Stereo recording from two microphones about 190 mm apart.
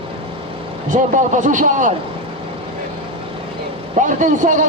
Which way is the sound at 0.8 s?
40° right (ahead or behind).